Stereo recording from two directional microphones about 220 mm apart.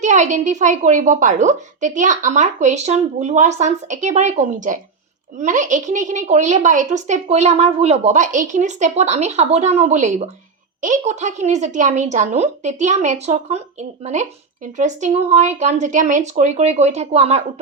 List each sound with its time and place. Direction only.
0.0 s a woman's voice: 35° right (ahead or behind)